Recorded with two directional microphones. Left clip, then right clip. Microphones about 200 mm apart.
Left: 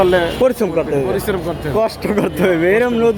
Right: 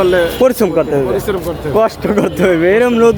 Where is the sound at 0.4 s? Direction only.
20° right (ahead or behind).